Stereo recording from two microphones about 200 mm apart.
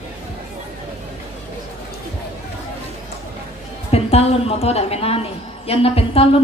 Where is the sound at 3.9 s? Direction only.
30° left (ahead or behind).